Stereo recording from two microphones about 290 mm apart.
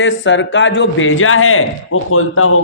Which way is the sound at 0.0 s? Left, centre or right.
Left.